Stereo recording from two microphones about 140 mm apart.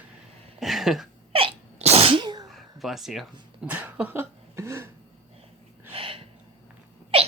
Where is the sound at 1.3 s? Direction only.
45° right (ahead or behind).